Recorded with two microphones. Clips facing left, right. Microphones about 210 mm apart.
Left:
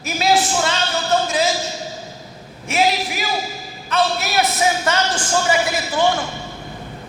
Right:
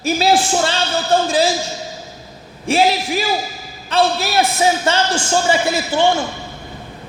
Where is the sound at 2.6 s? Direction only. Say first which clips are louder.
Right 3 dB; 30° right (ahead or behind).